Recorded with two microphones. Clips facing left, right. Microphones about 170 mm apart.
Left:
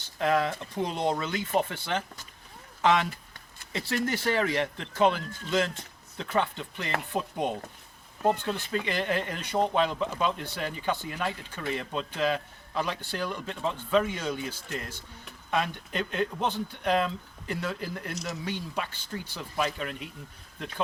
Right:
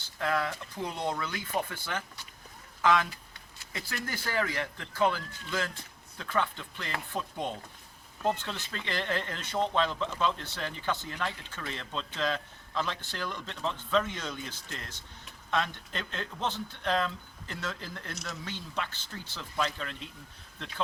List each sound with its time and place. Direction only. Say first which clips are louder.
0.2 s speech: left 5 dB; 20° left (ahead or behind)
3.1 s a sound: left 6 dB; 50° left (ahead or behind)
3.7 s speech: left 9 dB; 25° left (ahead or behind)
8.9 s speech: left 1 dB; 15° left (ahead or behind)